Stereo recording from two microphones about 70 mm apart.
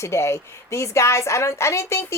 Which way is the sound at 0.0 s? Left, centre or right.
Left.